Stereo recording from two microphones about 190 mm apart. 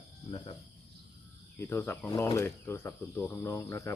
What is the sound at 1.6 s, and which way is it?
Speech, 15° left (ahead or behind).